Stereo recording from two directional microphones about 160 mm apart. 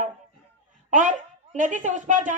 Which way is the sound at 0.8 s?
50° right (ahead or behind).